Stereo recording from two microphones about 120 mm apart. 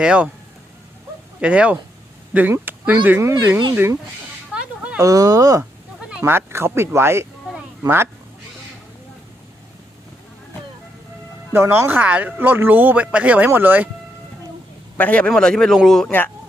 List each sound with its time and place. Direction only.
0.0 s speech: 10° right (ahead or behind)
1.4 s speech: 10° right (ahead or behind)
4.5 s a sound: 10° right (ahead or behind)
4.9 s speech: 30° right (ahead or behind)
6.0 s speech: 10° right (ahead or behind)
11.5 s speech: 20° right (ahead or behind)
14.9 s speech: 10° left (ahead or behind)